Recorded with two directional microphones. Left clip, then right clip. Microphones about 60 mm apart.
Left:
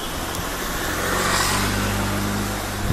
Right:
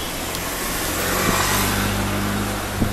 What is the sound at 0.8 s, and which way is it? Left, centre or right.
Vehicle, right.